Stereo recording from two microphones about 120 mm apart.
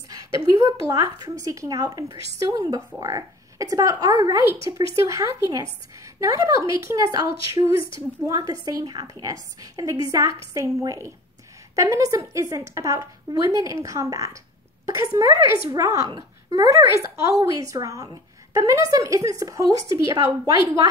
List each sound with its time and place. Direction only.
0.1 s a woman's voice: 30° right (ahead or behind)
7.7 s a woman's voice: 45° left (ahead or behind)
8.3 s a child's voice: 30° right (ahead or behind)